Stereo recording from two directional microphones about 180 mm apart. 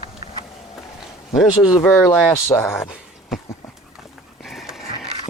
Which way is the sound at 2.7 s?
Centre (ahead or behind).